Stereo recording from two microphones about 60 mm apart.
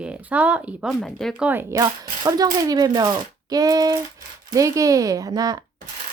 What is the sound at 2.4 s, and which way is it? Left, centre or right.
Speech, right.